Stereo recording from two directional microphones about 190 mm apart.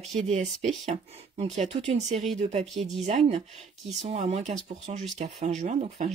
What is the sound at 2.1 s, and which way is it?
Speech, centre (ahead or behind).